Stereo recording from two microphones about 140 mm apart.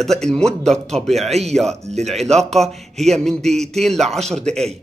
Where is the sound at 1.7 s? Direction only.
55° right (ahead or behind).